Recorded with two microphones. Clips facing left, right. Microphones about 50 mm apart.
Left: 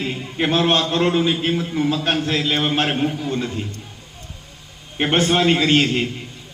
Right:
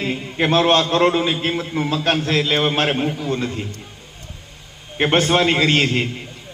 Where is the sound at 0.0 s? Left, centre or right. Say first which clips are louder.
Right 2 dB; centre.